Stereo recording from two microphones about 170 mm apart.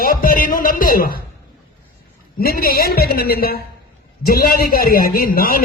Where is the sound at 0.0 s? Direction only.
55° left (ahead or behind).